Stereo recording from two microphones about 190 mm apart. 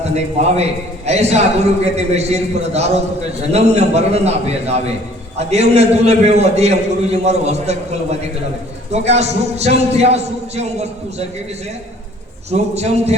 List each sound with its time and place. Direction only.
0.5 s a man's voice: 35° right (ahead or behind)
12.5 s a man's voice: 35° right (ahead or behind)